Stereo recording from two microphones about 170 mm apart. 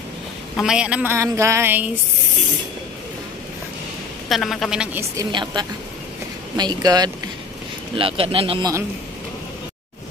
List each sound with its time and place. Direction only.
0.6 s speech: 5° right (ahead or behind)
4.3 s speech: centre (ahead or behind)
5.2 s speech: 25° right (ahead or behind)